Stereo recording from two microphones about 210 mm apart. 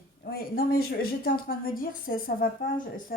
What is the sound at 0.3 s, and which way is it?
A woman's voice, 45° left (ahead or behind).